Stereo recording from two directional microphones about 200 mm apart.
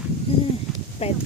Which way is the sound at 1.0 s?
30° left (ahead or behind).